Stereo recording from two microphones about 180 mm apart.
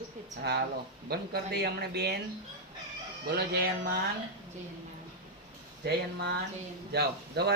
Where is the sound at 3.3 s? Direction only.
65° right (ahead or behind).